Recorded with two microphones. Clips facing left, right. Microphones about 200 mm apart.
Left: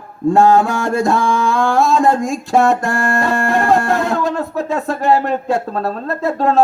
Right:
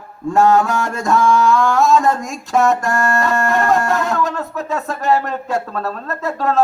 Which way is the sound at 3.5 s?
30° left (ahead or behind).